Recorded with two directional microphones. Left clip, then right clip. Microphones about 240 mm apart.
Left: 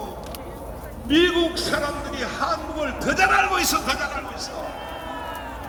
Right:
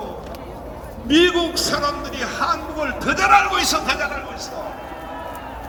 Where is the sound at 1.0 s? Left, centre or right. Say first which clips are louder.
Right 3 dB; right.